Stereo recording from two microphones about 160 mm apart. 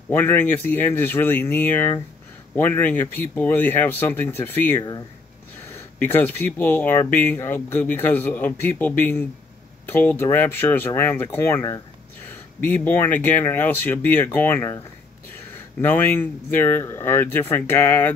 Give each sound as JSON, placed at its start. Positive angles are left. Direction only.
{"t": 0.1, "sound": "speech", "side_deg": 15}